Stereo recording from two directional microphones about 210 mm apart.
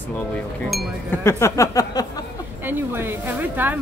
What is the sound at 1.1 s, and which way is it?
Speech, 15° left (ahead or behind).